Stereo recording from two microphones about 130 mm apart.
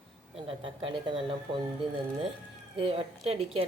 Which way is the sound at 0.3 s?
45° right (ahead or behind).